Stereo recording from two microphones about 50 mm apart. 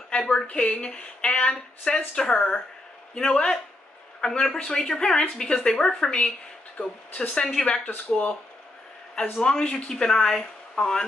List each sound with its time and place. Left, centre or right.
0.1 s a sound: centre
0.5 s speech: left
9.1 s speech: centre